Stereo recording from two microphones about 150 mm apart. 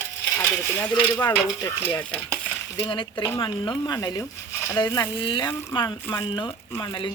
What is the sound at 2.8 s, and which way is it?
Speech, 35° left (ahead or behind).